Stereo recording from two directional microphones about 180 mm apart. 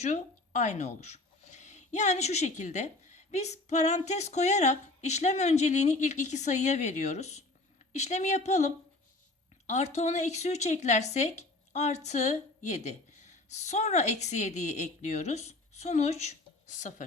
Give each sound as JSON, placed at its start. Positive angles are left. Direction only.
{"t": 0.0, "sound": "a woman's voice", "side_deg": 40}